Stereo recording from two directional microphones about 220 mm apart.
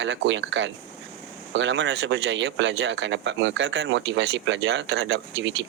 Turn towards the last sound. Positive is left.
turn(degrees=-55)  # may be behind; listen again after turning